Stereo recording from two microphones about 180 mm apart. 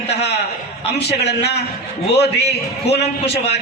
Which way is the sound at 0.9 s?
65° left (ahead or behind).